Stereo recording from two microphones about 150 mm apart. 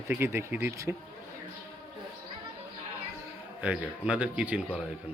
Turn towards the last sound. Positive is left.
turn(degrees=-10)  # may be behind; listen again after turning